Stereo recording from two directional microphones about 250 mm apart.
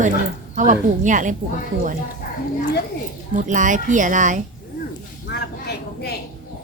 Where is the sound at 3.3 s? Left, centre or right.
Right.